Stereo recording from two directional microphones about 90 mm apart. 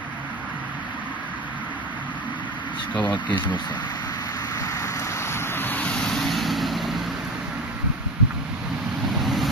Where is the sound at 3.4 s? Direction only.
55° left (ahead or behind); by 6.0 s 15° left (ahead or behind).